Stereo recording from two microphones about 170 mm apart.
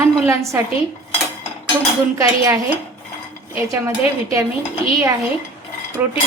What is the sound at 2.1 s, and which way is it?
Dishes, 20° right (ahead or behind).